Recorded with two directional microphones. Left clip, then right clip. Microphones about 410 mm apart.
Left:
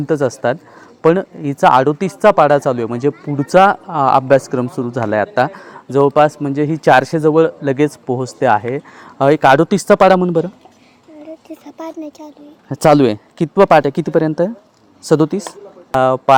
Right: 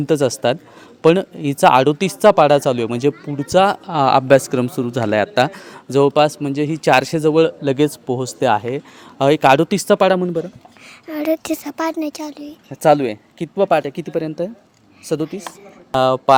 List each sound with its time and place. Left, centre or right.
0.0 s a man's voice: centre
3.3 s speech: centre
3.8 s a man's voice: centre
11.2 s speech: right
12.7 s speech: left
15.9 s a man's voice: centre